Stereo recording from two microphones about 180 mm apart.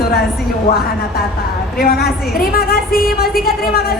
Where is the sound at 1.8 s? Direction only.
55° left (ahead or behind).